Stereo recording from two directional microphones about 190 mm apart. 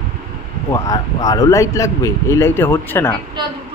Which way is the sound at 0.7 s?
20° left (ahead or behind).